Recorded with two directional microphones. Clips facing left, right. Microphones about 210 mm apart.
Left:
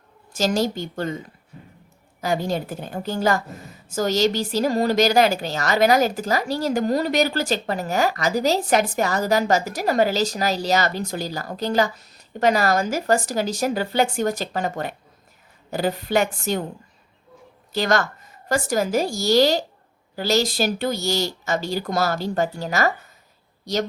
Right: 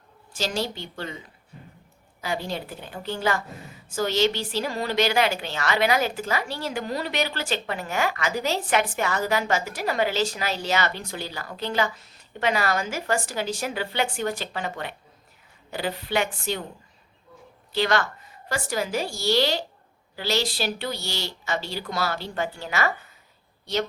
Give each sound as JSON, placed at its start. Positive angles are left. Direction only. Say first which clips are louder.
{"t": 0.3, "sound": "speech", "louder": "left 7 dB", "side_deg": 45}
{"t": 2.2, "sound": "a woman's voice", "louder": "left 6 dB", "side_deg": 45}
{"t": 17.7, "sound": "a woman's voice", "louder": "left 2 dB", "side_deg": 45}